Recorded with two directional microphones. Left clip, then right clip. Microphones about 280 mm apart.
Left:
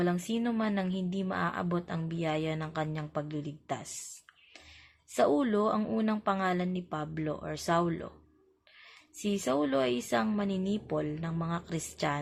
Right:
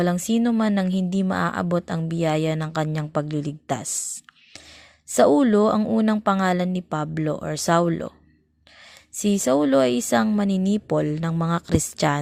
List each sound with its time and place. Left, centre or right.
0.0 s speech: right
5.1 s speech: right
9.1 s speech: right